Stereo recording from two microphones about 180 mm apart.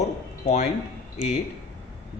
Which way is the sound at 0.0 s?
40° left (ahead or behind).